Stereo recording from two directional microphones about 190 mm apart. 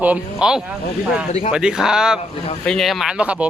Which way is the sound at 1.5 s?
5° right (ahead or behind).